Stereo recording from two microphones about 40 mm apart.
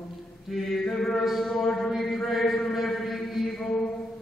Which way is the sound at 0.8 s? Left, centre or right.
Centre.